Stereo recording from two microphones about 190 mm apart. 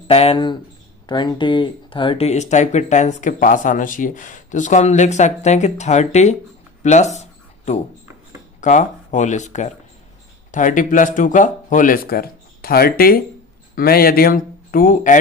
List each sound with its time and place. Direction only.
0.1 s speech: 30° left (ahead or behind)
6.8 s a sound: 35° left (ahead or behind)
8.6 s speech: 40° left (ahead or behind)